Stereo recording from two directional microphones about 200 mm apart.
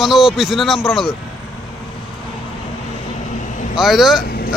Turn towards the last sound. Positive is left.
turn(degrees=50)  # may be behind; listen again after turning